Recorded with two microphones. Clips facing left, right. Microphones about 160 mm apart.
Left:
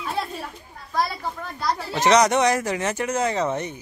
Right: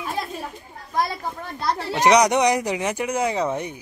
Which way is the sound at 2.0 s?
15° right (ahead or behind).